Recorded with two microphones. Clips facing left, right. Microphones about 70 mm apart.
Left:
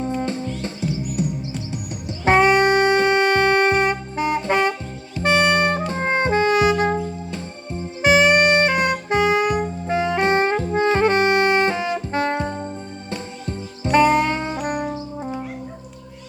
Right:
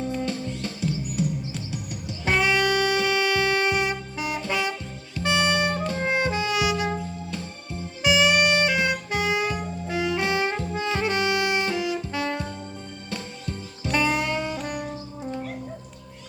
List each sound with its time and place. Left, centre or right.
0.2 s music: left
2.2 s music: left
5.9 s saxophone: left
6.9 s music: left
8.0 s music: left
9.5 s saxophone: left
13.1 s music: left